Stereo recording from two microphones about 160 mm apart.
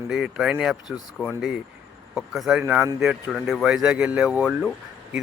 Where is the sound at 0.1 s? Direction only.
5° right (ahead or behind).